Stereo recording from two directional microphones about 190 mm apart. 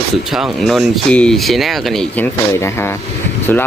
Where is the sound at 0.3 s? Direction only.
Centre (ahead or behind).